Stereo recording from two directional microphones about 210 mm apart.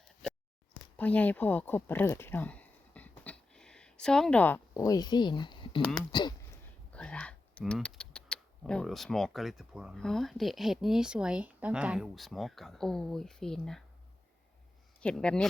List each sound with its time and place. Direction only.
0.2 s a sound: centre (ahead or behind); by 5.8 s 20° left (ahead or behind)
6.1 s speech: 20° left (ahead or behind)
6.9 s speech: 5° left (ahead or behind)
15.0 s speech: 5° left (ahead or behind)